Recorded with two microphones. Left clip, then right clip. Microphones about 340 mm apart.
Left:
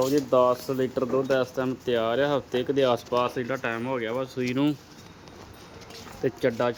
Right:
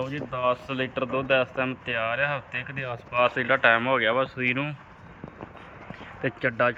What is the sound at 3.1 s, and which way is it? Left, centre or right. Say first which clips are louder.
Speech: right 4 dB; centre.